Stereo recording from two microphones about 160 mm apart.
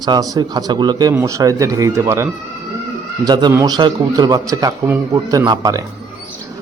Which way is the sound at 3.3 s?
25° right (ahead or behind).